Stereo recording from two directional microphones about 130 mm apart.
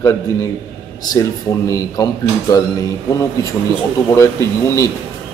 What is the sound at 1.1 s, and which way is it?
Speech, 25° left (ahead or behind).